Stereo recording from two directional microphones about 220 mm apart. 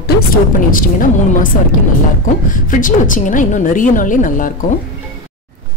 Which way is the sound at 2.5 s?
35° left (ahead or behind).